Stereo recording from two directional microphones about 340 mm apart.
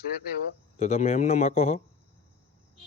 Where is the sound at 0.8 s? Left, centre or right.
Centre.